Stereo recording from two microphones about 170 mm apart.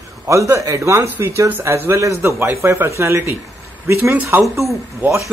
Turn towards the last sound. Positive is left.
turn(degrees=-15)  # may be behind; listen again after turning